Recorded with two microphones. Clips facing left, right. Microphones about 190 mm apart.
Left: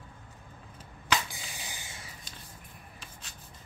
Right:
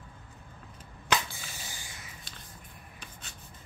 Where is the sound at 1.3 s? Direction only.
15° left (ahead or behind).